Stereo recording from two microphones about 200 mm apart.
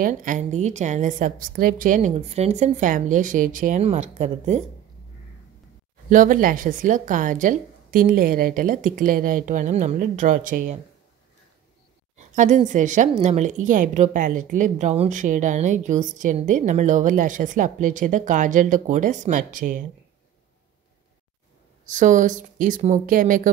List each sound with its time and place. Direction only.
0.0 s speech: 40° right (ahead or behind)
6.0 s speech: 40° right (ahead or behind)
12.2 s speech: 35° right (ahead or behind)
21.8 s speech: 40° right (ahead or behind)